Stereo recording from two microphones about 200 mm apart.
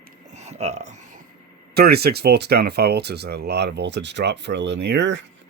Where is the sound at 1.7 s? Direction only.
50° right (ahead or behind).